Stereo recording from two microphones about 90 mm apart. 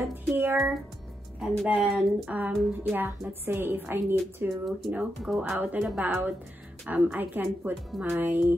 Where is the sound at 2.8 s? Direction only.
20° right (ahead or behind).